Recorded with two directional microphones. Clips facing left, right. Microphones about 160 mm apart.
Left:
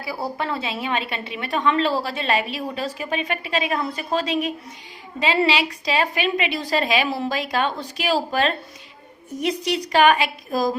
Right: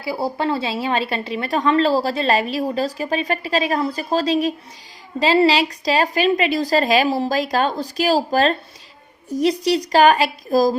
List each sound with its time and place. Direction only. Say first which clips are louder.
0.0 s speech: right 5 dB; 30° right (ahead or behind)